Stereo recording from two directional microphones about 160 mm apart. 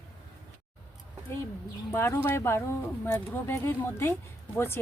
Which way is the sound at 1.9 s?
15° left (ahead or behind).